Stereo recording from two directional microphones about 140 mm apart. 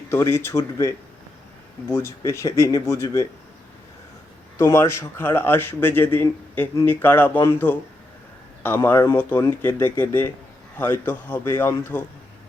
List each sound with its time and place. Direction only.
0.1 s speech: 20° left (ahead or behind)
4.5 s speech: 20° left (ahead or behind)